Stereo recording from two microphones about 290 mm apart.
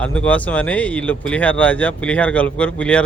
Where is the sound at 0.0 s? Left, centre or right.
Centre.